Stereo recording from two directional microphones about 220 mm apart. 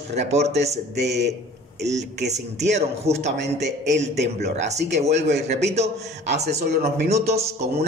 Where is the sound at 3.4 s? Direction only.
55° right (ahead or behind).